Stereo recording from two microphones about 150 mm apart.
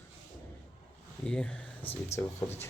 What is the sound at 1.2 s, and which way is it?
Speech, 5° left (ahead or behind).